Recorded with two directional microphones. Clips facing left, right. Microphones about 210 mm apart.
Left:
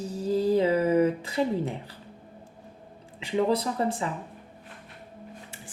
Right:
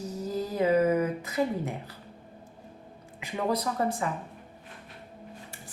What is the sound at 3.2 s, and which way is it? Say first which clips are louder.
Speech: left 4 dB; 25° left (ahead or behind).